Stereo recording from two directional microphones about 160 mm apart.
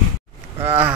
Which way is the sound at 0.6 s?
15° right (ahead or behind).